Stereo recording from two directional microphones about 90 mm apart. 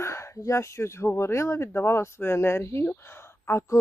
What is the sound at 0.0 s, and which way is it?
Speech, 30° left (ahead or behind).